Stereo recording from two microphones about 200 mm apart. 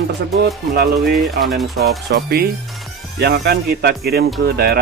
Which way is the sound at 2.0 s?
50° right (ahead or behind).